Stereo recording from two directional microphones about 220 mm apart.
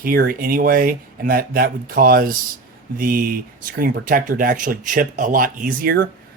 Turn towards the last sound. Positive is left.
turn(degrees=-45)  # may be behind; listen again after turning